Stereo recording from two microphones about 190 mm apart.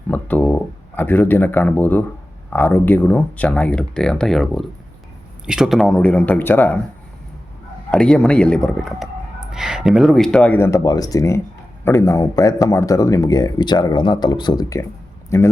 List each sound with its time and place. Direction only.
0.1 s speech: 10° left (ahead or behind)
7.9 s a man's voice: 5° left (ahead or behind)